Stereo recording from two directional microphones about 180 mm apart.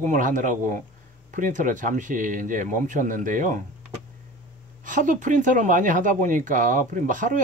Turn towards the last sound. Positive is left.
turn(degrees=-45)  # may be behind; listen again after turning